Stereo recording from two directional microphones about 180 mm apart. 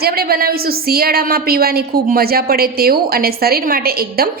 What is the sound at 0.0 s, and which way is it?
A woman's voice, 60° right (ahead or behind).